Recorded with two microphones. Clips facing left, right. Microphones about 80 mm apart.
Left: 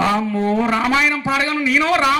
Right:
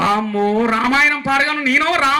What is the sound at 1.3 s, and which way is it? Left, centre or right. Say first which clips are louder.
Speech: right 2 dB; right.